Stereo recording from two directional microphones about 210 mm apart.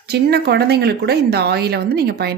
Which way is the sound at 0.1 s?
50° right (ahead or behind).